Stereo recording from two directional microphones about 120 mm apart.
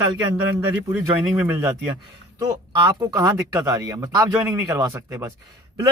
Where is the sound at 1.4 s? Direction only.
20° right (ahead or behind).